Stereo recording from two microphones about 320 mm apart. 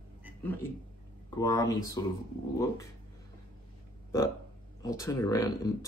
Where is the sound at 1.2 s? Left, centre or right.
Centre.